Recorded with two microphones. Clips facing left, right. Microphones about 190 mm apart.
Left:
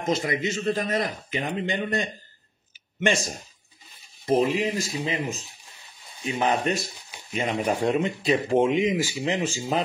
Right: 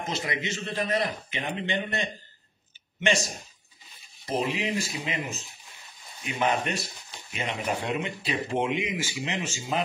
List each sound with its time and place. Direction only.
0.1 s a man's voice: 45° left (ahead or behind)
4.3 s a man's voice: 45° left (ahead or behind)
6.2 s speech: 30° left (ahead or behind)
7.3 s speech: 45° left (ahead or behind)